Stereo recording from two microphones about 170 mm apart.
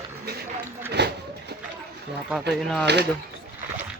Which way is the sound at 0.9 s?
75° right (ahead or behind).